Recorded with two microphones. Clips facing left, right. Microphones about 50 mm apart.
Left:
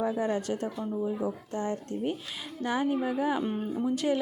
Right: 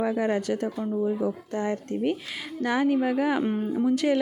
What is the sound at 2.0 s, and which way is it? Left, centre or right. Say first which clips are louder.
Speech: right 5 dB; right.